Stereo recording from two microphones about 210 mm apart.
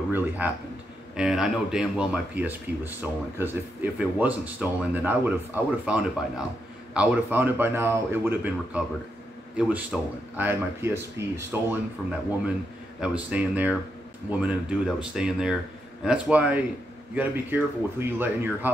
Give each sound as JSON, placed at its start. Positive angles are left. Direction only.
{"t": 0.4, "sound": "speech", "side_deg": -10}
{"t": 13.0, "sound": "speech", "side_deg": -5}